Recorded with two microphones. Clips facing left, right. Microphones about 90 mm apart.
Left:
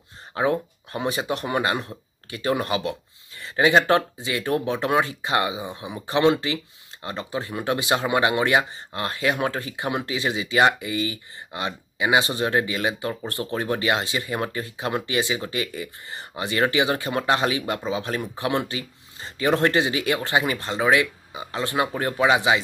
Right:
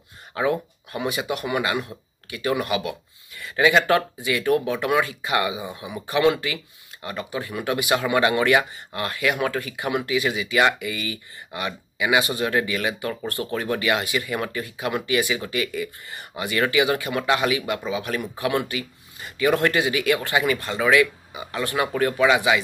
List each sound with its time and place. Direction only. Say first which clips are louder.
0.3 s speech: even; 30° left (ahead or behind)